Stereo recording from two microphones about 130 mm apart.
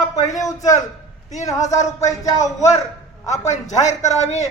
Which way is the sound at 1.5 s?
65° left (ahead or behind).